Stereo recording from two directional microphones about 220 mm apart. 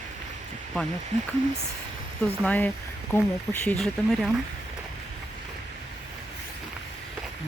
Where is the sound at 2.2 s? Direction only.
5° left (ahead or behind).